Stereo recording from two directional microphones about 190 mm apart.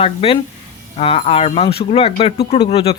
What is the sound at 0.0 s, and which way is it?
Speech, 30° left (ahead or behind).